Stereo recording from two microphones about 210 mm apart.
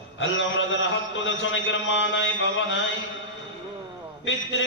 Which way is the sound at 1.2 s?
65° left (ahead or behind).